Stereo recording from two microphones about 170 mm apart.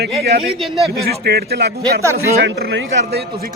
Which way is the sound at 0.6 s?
Centre (ahead or behind).